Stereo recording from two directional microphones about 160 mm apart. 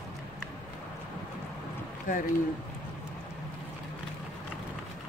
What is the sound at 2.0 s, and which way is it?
Speech, 55° left (ahead or behind).